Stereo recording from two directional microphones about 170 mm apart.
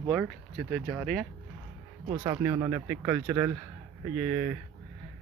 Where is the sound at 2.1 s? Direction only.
25° right (ahead or behind).